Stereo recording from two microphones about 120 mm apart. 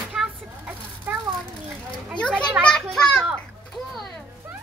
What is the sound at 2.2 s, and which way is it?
Children playing, 10° left (ahead or behind).